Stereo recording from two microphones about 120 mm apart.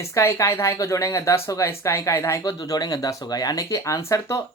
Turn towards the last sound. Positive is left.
turn(degrees=25)  # may be behind; listen again after turning